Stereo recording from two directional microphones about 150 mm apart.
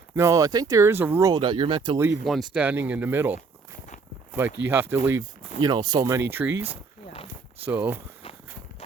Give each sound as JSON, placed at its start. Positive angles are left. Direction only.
{"t": 0.2, "sound": "speech", "side_deg": -20}
{"t": 1.3, "sound": "speech", "side_deg": -30}
{"t": 2.2, "sound": "speech", "side_deg": 0}
{"t": 5.5, "sound": "speech", "side_deg": -30}